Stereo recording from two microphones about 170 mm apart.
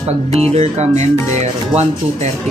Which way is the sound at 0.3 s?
35° right (ahead or behind).